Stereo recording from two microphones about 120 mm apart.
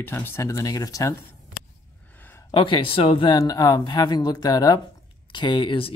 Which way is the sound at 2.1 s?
15° left (ahead or behind).